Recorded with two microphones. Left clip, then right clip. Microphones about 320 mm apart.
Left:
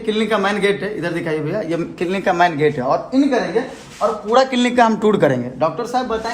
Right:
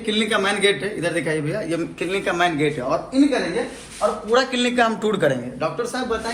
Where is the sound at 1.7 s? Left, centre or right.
Left.